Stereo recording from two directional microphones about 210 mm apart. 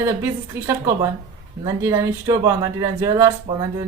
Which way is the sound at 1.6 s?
15° right (ahead or behind).